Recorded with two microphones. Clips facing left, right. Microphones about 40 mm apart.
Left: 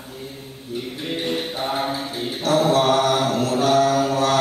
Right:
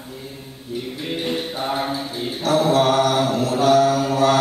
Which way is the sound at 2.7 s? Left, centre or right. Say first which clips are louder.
Right 1 dB; right.